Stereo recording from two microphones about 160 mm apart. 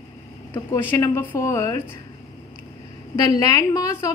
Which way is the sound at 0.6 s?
15° left (ahead or behind).